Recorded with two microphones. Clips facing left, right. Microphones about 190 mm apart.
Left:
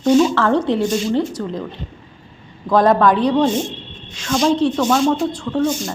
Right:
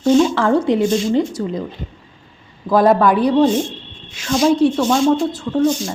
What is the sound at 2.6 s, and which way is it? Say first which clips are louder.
A woman's voice: right 1 dB; 10° right (ahead or behind).